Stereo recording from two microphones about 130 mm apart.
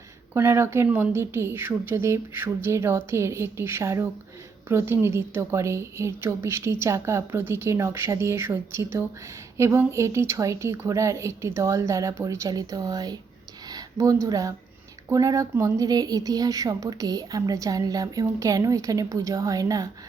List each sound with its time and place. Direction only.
0.3 s a woman's voice: 20° right (ahead or behind)